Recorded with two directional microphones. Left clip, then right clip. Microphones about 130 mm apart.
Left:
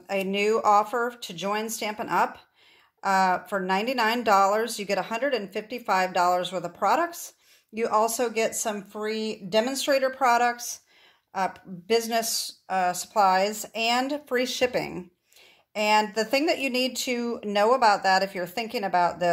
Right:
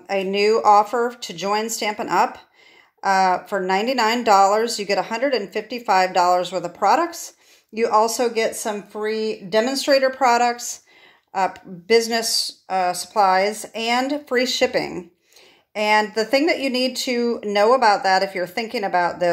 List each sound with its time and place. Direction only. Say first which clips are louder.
0.1 s a woman's voice: right 6 dB; 35° left (ahead or behind)